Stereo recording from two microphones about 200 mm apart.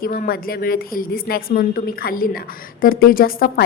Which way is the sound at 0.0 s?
45° left (ahead or behind).